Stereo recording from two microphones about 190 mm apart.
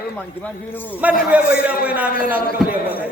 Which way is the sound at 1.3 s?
10° right (ahead or behind).